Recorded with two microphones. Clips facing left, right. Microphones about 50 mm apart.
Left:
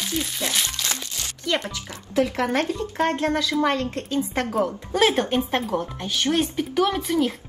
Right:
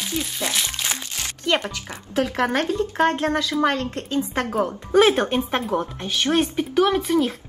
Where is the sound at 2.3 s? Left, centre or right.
Right.